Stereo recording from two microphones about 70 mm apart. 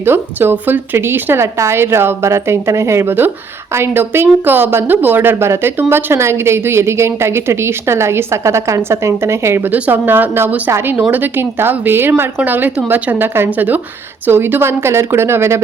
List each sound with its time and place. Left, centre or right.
0.0 s a woman's voice: right
9.7 s a woman's voice: right